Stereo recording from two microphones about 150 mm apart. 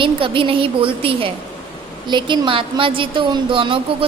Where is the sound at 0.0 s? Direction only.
35° right (ahead or behind).